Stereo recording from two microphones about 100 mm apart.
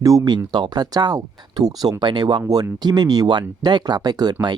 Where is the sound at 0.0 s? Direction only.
35° right (ahead or behind).